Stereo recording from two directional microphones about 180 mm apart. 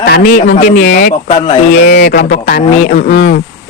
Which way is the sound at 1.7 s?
60° left (ahead or behind).